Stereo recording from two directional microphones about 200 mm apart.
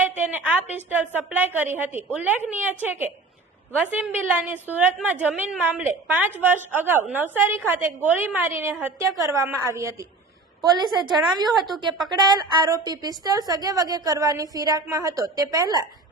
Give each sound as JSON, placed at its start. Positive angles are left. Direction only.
{"t": 0.2, "sound": "a sound", "side_deg": -10}
{"t": 0.8, "sound": "a woman's voice", "side_deg": -10}
{"t": 11.4, "sound": "speech", "side_deg": 0}
{"t": 12.1, "sound": "a woman's voice", "side_deg": -20}